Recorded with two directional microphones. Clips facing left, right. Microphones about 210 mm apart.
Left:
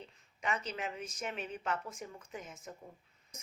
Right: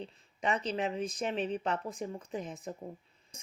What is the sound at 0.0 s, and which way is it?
Speech, 35° right (ahead or behind).